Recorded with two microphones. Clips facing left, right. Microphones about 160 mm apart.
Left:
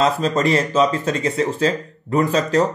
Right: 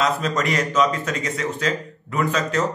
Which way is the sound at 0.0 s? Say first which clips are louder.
Left 4 dB; 30° left (ahead or behind).